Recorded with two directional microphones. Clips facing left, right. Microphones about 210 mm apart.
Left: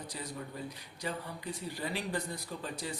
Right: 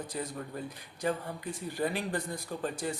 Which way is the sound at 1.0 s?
50° right (ahead or behind).